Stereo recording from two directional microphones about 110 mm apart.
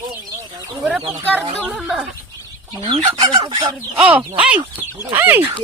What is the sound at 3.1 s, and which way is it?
Speech, 45° right (ahead or behind).